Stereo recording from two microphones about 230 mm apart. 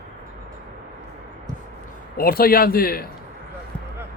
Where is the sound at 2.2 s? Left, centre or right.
Left.